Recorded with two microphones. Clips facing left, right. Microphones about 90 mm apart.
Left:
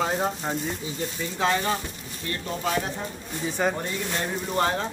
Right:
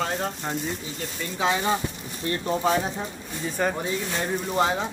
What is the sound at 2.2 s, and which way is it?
Speech, 25° right (ahead or behind).